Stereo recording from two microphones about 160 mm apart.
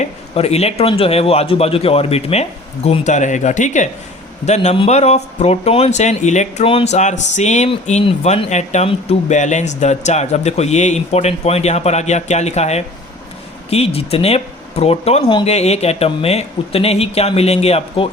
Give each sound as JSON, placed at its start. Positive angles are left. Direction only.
{"t": 0.0, "sound": "a man's voice", "side_deg": 40}
{"t": 15.2, "sound": "speech", "side_deg": 30}
{"t": 15.4, "sound": "a man's voice", "side_deg": 40}